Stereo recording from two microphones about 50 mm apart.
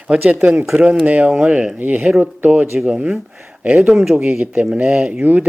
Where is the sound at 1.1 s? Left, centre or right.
Right.